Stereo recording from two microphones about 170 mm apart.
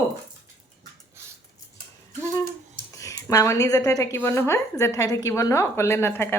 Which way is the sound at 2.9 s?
20° left (ahead or behind).